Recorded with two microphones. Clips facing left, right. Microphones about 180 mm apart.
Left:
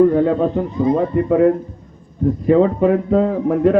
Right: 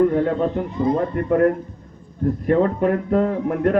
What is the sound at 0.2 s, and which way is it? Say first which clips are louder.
A man's voice: left 4 dB; centre (ahead or behind).